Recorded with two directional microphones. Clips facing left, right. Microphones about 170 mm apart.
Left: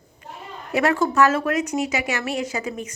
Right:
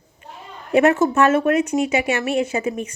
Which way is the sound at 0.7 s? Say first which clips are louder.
Right 5 dB; 25° right (ahead or behind).